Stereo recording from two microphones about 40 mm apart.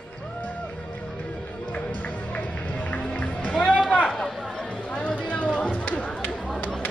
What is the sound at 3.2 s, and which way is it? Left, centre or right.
Music, left.